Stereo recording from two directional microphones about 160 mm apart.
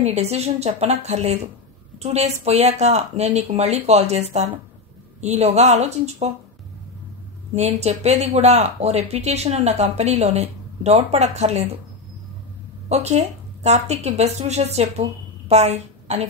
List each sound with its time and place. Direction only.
0.0 s a woman's voice: 40° right (ahead or behind)
7.5 s speech: 40° right (ahead or behind)
12.8 s speech: 45° right (ahead or behind)